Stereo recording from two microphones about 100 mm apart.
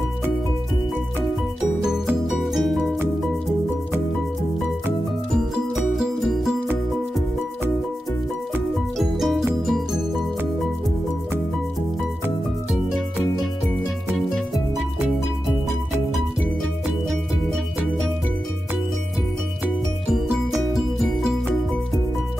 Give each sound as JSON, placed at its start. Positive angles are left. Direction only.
{"t": 2.5, "sound": "music", "side_deg": 0}
{"t": 5.9, "sound": "music", "side_deg": -5}
{"t": 8.9, "sound": "music", "side_deg": 0}
{"t": 20.7, "sound": "music", "side_deg": 0}